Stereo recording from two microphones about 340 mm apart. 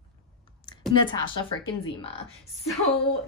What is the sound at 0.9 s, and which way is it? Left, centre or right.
A woman's voice, centre.